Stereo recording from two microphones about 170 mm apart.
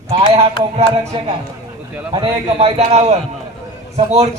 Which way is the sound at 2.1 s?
35° right (ahead or behind).